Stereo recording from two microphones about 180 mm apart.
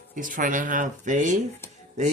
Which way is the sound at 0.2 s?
45° right (ahead or behind).